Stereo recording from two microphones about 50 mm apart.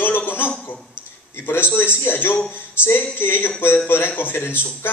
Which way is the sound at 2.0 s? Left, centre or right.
Left.